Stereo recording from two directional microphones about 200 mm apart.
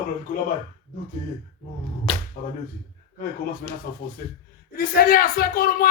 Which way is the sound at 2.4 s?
50° left (ahead or behind).